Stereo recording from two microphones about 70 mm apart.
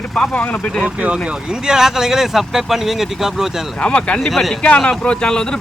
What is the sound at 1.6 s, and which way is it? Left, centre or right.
Speech, centre.